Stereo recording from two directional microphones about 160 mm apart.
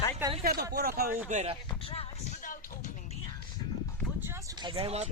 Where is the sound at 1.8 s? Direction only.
35° left (ahead or behind).